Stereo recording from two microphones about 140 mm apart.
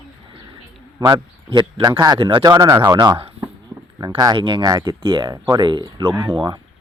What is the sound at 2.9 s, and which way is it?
Speech, 35° right (ahead or behind).